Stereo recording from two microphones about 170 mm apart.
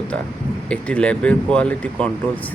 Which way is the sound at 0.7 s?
5° left (ahead or behind).